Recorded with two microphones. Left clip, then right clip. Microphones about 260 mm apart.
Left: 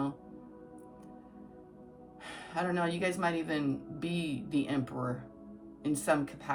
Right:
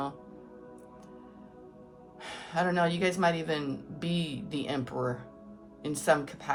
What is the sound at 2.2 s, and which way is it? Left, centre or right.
A man's voice, right.